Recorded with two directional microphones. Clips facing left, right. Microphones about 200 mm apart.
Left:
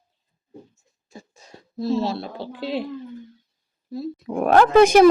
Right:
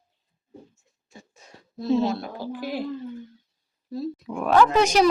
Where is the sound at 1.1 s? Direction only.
35° left (ahead or behind).